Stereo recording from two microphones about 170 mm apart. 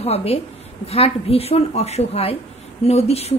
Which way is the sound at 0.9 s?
35° left (ahead or behind).